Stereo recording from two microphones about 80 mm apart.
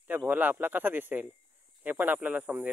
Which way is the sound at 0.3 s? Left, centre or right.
Right.